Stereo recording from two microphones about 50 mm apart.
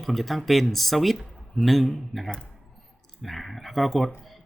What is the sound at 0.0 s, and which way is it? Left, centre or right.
Speech, centre.